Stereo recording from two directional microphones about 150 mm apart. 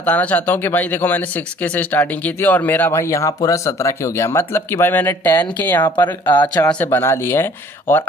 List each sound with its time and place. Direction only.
0.0 s speech: 10° left (ahead or behind)
5.9 s speech: 30° left (ahead or behind)
6.5 s speech: 10° left (ahead or behind)